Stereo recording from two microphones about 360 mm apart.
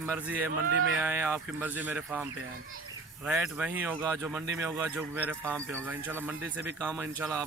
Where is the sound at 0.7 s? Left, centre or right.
Right.